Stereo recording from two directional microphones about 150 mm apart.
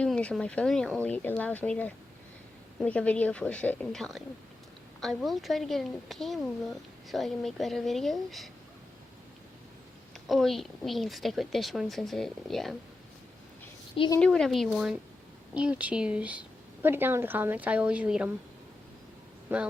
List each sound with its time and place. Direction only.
0.0 s a woman's voice: 5° left (ahead or behind)
10.2 s a woman's voice: centre (ahead or behind)
14.2 s a woman's voice: 5° left (ahead or behind)
19.5 s a woman's voice: 15° right (ahead or behind)